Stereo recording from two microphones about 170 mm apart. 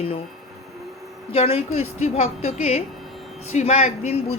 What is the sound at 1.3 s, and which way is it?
A child's voice, 35° left (ahead or behind).